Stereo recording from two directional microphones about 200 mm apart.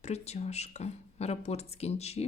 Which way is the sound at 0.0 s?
35° left (ahead or behind).